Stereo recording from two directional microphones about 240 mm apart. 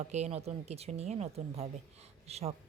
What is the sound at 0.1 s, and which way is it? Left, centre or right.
A woman's voice, right.